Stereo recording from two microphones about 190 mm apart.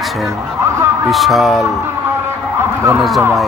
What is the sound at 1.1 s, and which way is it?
Speech, centre (ahead or behind).